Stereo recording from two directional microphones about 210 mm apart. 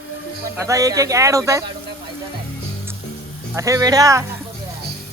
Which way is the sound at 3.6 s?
15° right (ahead or behind).